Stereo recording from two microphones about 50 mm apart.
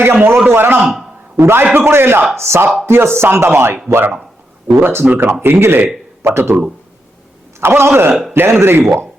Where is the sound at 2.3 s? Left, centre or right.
Right.